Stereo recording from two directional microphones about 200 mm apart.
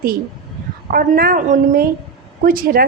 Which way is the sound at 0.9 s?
50° right (ahead or behind).